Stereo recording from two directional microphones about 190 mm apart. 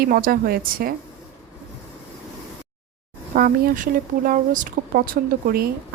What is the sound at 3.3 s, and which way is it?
Speech, 50° right (ahead or behind).